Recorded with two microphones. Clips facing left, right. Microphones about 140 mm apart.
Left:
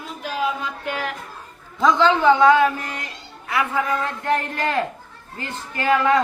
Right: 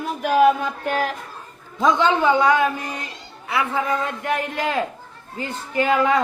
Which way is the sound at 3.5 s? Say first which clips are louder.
Even; 25° right (ahead or behind).